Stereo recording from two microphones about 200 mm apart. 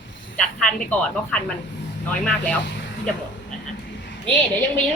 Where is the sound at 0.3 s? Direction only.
5° left (ahead or behind).